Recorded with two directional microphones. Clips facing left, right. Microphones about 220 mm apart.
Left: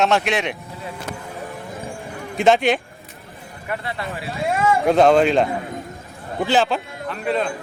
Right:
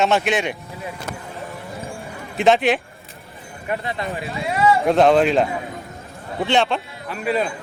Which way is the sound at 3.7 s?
20° right (ahead or behind).